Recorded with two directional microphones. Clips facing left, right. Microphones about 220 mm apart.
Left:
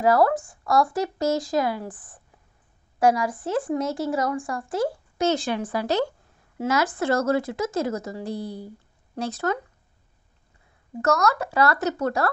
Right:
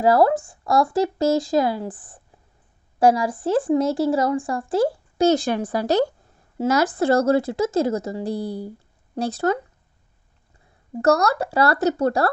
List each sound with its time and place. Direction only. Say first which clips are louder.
0.0 s speech: right 3 dB; 30° right (ahead or behind)
11.0 s speech: right 4 dB; 30° right (ahead or behind)